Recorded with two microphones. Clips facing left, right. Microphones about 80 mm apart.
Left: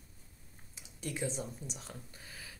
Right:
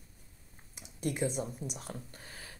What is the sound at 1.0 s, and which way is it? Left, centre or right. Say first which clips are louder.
Speech: right 5 dB; right.